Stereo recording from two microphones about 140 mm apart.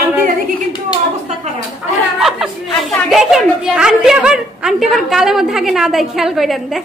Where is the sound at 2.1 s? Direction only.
5° right (ahead or behind).